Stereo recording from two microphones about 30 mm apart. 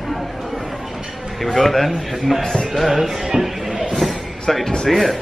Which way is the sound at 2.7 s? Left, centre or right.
Centre.